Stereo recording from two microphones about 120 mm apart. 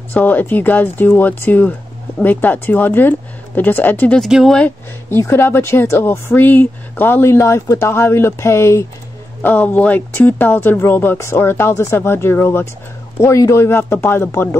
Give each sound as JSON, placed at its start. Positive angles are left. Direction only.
{"t": 0.1, "sound": "speech", "side_deg": 15}
{"t": 4.2, "sound": "speech", "side_deg": 0}
{"t": 4.6, "sound": "speech", "side_deg": 15}